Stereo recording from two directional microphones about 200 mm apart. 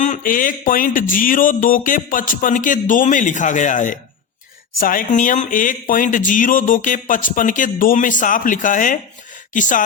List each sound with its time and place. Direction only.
0.0 s speech: 40° left (ahead or behind)